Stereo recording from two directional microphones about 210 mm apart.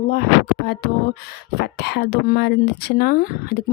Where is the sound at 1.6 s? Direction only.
50° left (ahead or behind).